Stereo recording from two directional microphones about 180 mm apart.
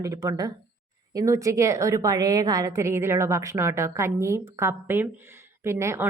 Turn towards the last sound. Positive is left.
turn(degrees=-15)  # may be behind; listen again after turning